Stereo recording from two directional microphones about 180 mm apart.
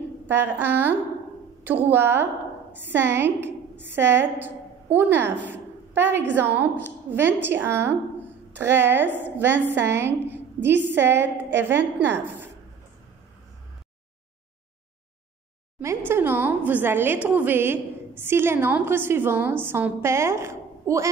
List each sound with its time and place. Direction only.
0.6 s a woman's voice: 10° right (ahead or behind)
15.8 s a woman's voice: 15° right (ahead or behind)